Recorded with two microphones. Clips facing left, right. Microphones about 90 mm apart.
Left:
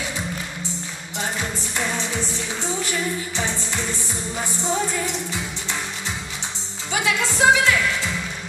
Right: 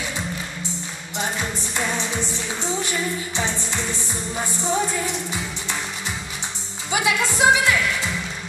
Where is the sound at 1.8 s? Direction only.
15° right (ahead or behind).